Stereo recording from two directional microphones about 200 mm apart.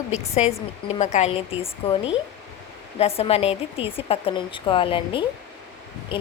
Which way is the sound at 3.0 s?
30° left (ahead or behind).